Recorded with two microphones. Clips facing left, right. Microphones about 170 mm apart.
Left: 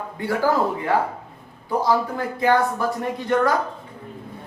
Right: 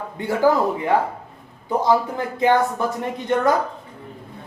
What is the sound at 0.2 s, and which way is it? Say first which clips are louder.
Speech: right 1 dB; 20° right (ahead or behind).